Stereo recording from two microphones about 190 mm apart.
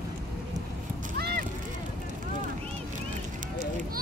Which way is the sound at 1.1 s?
55° right (ahead or behind).